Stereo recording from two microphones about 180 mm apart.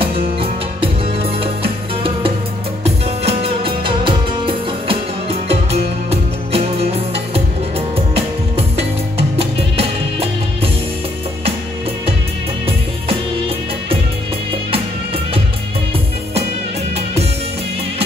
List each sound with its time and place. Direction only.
0.0 s music: 30° right (ahead or behind)
3.3 s music: 30° right (ahead or behind)
8.1 s music: 35° right (ahead or behind)
16.9 s music: 35° right (ahead or behind)